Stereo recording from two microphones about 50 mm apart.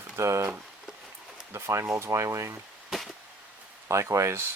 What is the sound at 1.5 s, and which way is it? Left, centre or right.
Speech, right.